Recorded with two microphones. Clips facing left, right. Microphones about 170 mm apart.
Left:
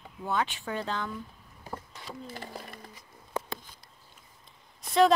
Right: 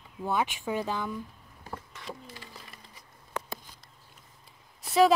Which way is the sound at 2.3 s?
50° left (ahead or behind).